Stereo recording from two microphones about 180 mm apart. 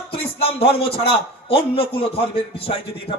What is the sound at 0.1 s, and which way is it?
Speech, 30° left (ahead or behind).